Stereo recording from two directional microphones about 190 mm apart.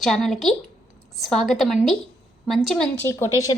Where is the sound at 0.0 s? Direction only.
Centre (ahead or behind).